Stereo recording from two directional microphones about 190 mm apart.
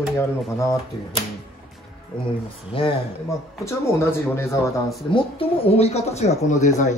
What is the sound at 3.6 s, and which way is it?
Speech, 15° left (ahead or behind).